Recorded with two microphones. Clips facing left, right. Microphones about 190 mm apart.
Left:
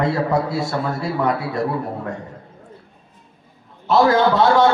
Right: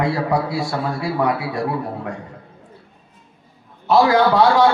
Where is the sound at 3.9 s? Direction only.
25° left (ahead or behind).